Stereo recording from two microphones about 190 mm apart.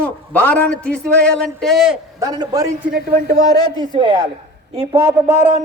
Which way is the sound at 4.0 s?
25° right (ahead or behind).